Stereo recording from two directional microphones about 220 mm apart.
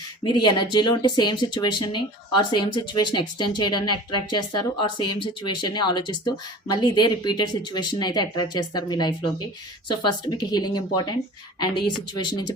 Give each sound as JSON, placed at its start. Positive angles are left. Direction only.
{"t": 0.3, "sound": "speech", "side_deg": 20}